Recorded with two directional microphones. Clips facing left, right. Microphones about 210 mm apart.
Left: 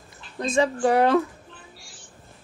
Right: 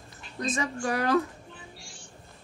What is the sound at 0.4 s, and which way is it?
Speech, 30° left (ahead or behind).